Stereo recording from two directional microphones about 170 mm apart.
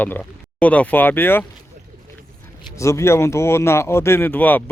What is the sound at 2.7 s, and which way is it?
Speech, 15° left (ahead or behind).